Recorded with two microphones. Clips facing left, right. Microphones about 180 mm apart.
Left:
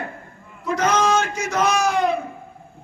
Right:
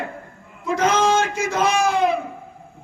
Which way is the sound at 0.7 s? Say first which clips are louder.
Right 1 dB; 25° right (ahead or behind).